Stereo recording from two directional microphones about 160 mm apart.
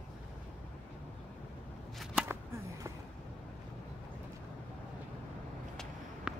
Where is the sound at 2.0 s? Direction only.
5° right (ahead or behind).